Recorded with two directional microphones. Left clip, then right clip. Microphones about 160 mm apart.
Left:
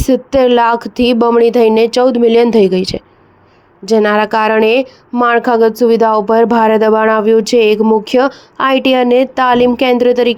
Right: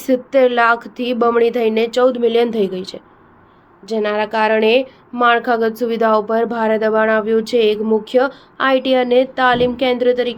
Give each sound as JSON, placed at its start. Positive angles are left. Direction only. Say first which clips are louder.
{"t": 0.0, "sound": "speech", "louder": "left 3 dB", "side_deg": 45}